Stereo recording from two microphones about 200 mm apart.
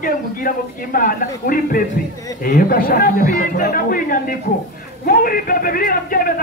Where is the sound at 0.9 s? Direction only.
40° left (ahead or behind).